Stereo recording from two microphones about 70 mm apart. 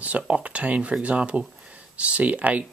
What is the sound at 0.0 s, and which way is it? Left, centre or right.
Speech, centre.